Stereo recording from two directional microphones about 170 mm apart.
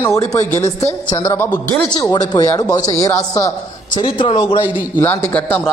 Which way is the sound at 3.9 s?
30° left (ahead or behind).